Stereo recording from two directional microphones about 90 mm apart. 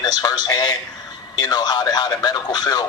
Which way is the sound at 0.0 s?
45° left (ahead or behind).